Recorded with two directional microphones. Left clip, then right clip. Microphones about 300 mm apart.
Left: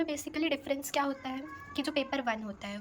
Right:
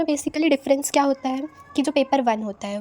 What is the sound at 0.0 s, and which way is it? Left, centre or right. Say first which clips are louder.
A woman's voice: right 11 dB; centre.